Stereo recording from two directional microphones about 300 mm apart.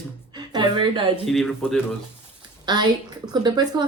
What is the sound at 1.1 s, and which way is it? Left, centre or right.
Speech, centre.